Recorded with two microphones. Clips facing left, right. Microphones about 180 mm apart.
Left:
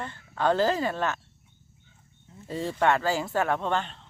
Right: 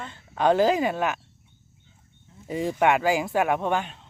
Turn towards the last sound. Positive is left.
turn(degrees=-10)  # may be behind; listen again after turning